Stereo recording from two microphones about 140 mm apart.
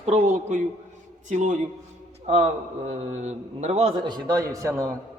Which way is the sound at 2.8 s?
55° right (ahead or behind).